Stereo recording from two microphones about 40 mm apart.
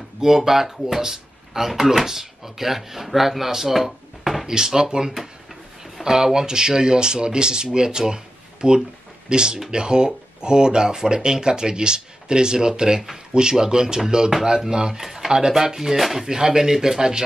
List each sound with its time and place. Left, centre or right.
0.2 s speech: centre
4.5 s speech: centre
15.0 s speech: centre